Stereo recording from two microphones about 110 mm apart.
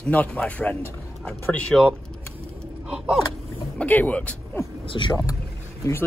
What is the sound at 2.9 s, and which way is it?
Gasp, 5° right (ahead or behind).